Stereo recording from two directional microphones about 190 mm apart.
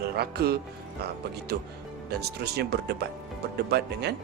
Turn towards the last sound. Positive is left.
turn(degrees=-60)  # may be behind; listen again after turning